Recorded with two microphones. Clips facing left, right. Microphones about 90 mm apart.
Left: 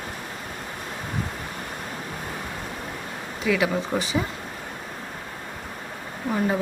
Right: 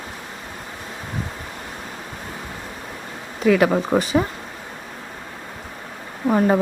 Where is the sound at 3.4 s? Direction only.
50° right (ahead or behind).